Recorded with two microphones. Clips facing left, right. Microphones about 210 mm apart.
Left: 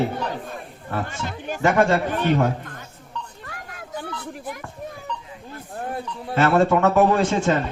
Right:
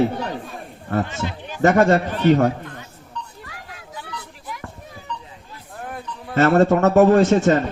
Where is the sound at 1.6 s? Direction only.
45° right (ahead or behind).